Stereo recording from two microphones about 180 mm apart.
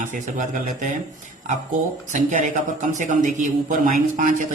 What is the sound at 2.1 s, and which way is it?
A man's voice, 40° right (ahead or behind).